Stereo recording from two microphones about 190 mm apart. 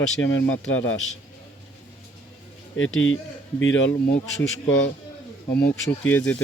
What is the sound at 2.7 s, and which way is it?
Speech, 90° left.